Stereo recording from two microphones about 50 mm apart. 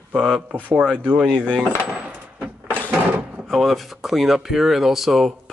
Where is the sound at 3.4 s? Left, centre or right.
Centre.